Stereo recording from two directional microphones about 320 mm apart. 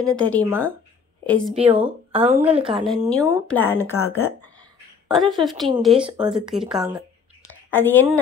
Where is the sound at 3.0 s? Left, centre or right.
Centre.